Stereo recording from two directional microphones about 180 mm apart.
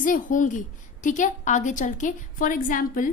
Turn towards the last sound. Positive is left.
turn(degrees=50)  # may be behind; listen again after turning